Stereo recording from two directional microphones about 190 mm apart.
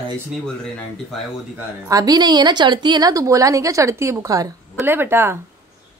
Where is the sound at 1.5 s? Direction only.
15° right (ahead or behind).